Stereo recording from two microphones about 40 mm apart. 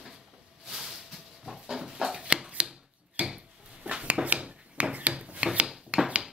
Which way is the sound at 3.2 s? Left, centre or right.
Right.